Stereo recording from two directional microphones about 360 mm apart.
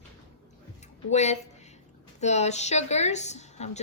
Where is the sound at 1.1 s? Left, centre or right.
Centre.